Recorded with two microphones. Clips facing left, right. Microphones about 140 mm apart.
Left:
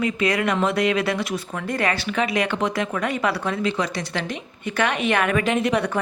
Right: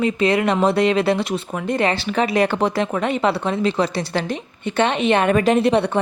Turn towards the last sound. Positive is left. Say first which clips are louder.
# right 5 dB
turn(degrees=-30)  # may be behind; listen again after turning